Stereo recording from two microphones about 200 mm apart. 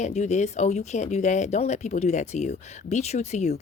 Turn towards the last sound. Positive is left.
turn(degrees=35)  # may be behind; listen again after turning